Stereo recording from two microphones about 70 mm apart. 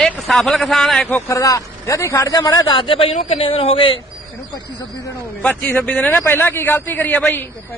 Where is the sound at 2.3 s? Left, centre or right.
Left.